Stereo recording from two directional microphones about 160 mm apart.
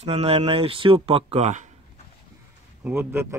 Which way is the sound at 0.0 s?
40° right (ahead or behind).